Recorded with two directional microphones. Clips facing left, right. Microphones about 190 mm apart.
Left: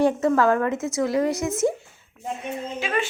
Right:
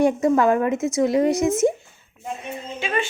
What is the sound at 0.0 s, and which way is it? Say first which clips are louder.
A woman's voice: right 2 dB; 15° right (ahead or behind).